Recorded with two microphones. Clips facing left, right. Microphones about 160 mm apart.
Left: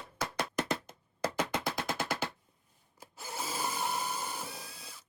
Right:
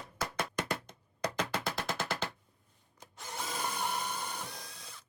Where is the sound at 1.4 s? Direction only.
20° left (ahead or behind).